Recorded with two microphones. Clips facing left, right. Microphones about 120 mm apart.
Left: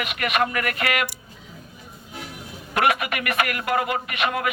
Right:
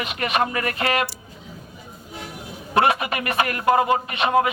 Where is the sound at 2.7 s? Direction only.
30° right (ahead or behind).